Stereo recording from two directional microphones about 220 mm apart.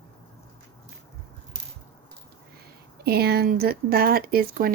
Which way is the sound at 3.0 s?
45° right (ahead or behind).